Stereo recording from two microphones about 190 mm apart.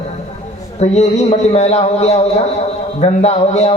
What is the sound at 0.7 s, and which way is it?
A man's voice, 35° left (ahead or behind).